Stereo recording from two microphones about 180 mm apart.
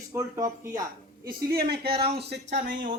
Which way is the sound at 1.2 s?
55° right (ahead or behind).